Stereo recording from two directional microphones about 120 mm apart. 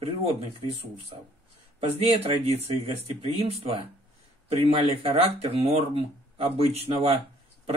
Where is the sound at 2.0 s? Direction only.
55° right (ahead or behind).